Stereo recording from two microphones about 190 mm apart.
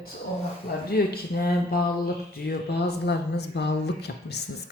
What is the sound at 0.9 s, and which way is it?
Speech, 55° left (ahead or behind).